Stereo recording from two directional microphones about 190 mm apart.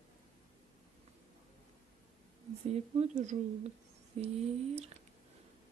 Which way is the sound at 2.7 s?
35° right (ahead or behind).